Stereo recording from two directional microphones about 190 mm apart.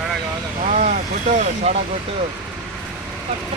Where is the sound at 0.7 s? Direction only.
40° right (ahead or behind).